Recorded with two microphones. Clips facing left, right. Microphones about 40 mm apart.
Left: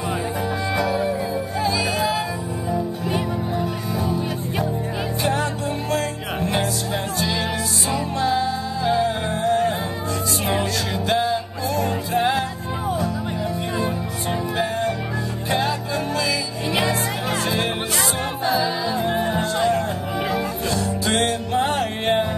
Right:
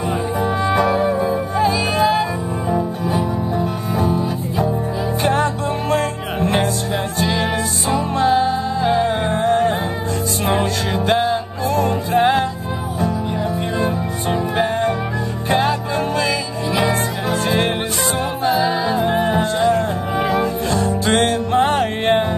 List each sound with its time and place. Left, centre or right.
0.7 s music: right
3.5 s music: right
5.2 s music: right
12.2 s music: right
13.8 s music: right
18.4 s music: right